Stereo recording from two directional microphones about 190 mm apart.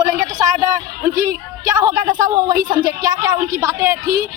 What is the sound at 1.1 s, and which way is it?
Speech, 45° right (ahead or behind).